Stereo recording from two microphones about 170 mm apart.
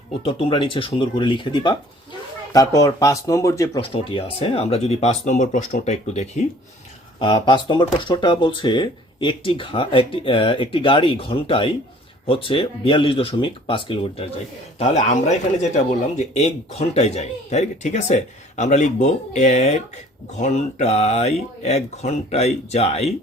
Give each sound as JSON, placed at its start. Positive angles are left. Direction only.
{"t": 0.3, "sound": "speech", "side_deg": 30}
{"t": 3.8, "sound": "speech", "side_deg": 35}
{"t": 7.2, "sound": "speech", "side_deg": 25}
{"t": 14.8, "sound": "a man's voice", "side_deg": 45}